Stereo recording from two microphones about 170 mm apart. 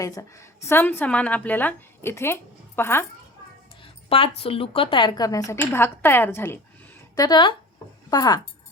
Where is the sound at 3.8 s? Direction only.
30° left (ahead or behind); by 7.3 s 15° left (ahead or behind).